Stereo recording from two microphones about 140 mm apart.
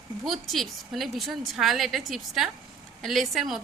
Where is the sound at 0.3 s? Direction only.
Centre (ahead or behind).